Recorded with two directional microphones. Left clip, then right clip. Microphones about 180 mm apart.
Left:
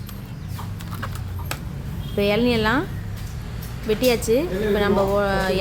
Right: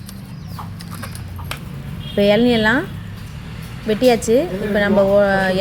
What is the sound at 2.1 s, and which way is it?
Speech, 15° right (ahead or behind).